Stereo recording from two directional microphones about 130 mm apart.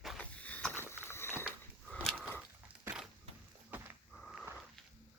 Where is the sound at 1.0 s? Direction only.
20° left (ahead or behind).